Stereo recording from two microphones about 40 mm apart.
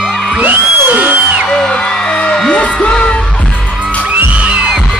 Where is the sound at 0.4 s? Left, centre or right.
Right.